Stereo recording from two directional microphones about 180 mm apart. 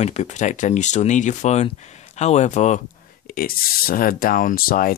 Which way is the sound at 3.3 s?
55° left (ahead or behind).